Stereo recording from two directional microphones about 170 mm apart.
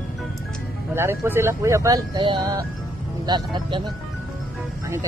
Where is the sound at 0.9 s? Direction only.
15° right (ahead or behind).